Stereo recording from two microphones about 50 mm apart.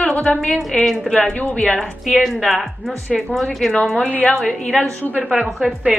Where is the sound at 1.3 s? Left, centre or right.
Left.